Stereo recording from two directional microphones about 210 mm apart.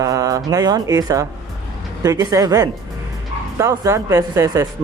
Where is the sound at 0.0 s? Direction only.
15° right (ahead or behind).